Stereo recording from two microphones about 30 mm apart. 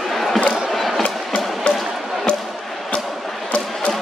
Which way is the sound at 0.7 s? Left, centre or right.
Centre.